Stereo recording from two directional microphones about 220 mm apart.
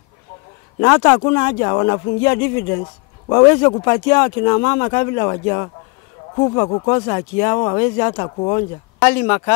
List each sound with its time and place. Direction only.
0.7 s speech: 15° left (ahead or behind)
9.0 s speech: 10° left (ahead or behind)